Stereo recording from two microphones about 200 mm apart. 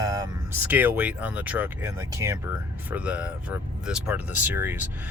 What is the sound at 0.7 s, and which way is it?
Speech, 10° right (ahead or behind).